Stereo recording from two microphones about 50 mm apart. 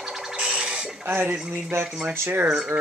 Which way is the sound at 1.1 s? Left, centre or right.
Right.